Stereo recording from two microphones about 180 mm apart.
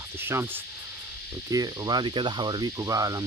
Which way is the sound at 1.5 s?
20° right (ahead or behind).